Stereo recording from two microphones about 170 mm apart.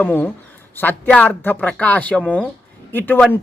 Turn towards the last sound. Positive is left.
turn(degrees=10)  # may be behind; listen again after turning